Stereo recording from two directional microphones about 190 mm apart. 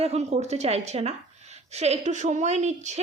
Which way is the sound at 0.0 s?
35° right (ahead or behind).